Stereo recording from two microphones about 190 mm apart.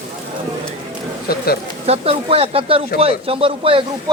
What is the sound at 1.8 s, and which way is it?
Speech, 30° right (ahead or behind).